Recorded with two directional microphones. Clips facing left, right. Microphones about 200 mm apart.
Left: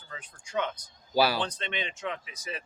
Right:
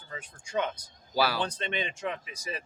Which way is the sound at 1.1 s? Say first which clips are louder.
Left 3 dB; 25° left (ahead or behind).